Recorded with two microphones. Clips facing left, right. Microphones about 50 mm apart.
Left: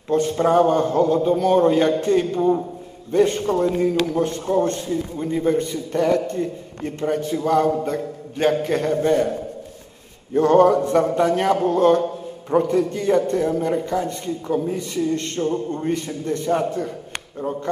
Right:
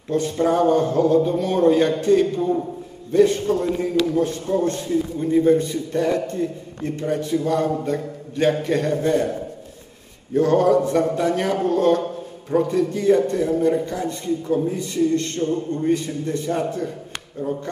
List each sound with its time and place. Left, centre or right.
0.1 s a man's voice: left
3.1 s a man's voice: left
6.0 s a man's voice: right
6.4 s a man's voice: left
10.3 s a man's voice: left
16.3 s a man's voice: left